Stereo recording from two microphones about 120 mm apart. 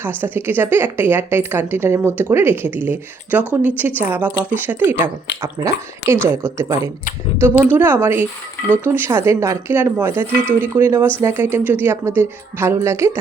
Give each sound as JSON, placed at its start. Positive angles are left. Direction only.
{"t": 0.2, "sound": "speech", "side_deg": -20}